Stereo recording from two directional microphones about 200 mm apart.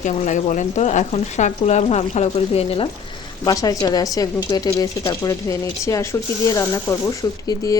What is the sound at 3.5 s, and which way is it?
Speech, 20° left (ahead or behind).